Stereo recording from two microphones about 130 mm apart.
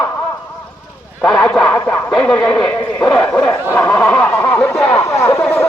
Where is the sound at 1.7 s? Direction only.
15° left (ahead or behind).